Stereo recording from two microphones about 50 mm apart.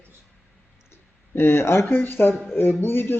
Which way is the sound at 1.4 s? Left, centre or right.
Left.